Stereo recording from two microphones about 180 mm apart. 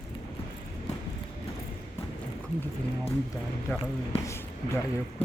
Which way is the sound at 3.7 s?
10° left (ahead or behind).